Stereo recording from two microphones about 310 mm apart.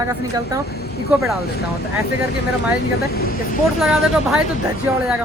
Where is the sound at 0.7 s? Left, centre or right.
Left.